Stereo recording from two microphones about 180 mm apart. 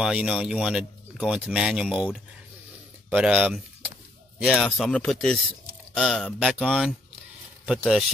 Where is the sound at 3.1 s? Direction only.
10° right (ahead or behind).